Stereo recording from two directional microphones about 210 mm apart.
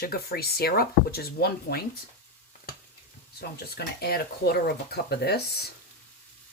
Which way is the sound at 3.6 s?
50° left (ahead or behind).